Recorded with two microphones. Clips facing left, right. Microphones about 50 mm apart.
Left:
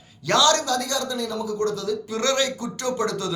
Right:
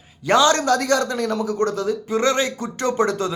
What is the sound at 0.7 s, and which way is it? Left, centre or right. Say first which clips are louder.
Speech: right 6 dB; right.